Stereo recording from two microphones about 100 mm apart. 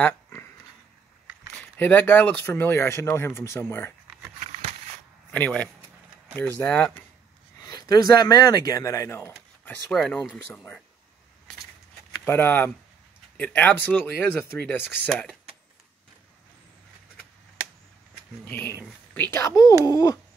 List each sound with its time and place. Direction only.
0.0 s a sound: 20° left (ahead or behind)
1.5 s speech: 15° left (ahead or behind)
5.3 s speech: 15° left (ahead or behind)
7.6 s speech: 40° left (ahead or behind)
9.7 s speech: 5° left (ahead or behind)
12.3 s speech: 20° left (ahead or behind)
18.4 s speech: 20° left (ahead or behind)
19.5 s speech: 35° left (ahead or behind)